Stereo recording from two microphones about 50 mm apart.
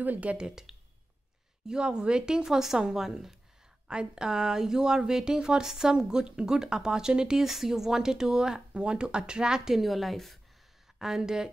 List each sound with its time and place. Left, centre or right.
0.0 s speech: right
0.7 s a sound: centre
1.7 s speech: centre
11.0 s speech: centre